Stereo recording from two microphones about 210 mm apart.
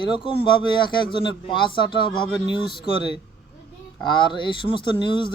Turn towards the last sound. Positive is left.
turn(degrees=25)  # may be behind; listen again after turning